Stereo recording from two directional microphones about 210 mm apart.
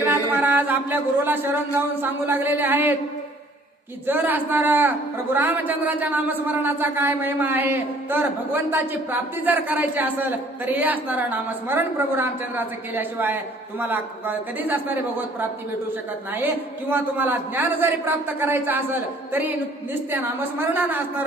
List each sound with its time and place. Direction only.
0.3 s a man's voice: 10° right (ahead or behind)
4.0 s a man's voice: 10° right (ahead or behind)
16.3 s a man's voice: 10° right (ahead or behind)